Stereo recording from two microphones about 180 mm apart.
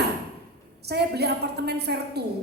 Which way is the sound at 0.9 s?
65° right (ahead or behind).